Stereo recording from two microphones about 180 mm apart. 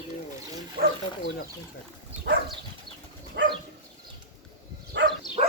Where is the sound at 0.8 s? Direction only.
55° right (ahead or behind).